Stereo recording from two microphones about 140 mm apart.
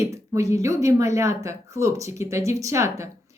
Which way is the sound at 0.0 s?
20° right (ahead or behind).